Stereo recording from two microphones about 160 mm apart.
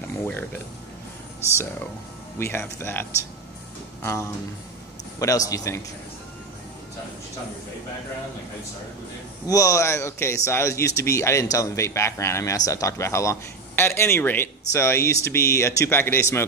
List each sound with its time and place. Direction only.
0.2 s speech: 10° left (ahead or behind)
2.3 s a man's voice: 15° left (ahead or behind)
9.5 s speech: 20° left (ahead or behind)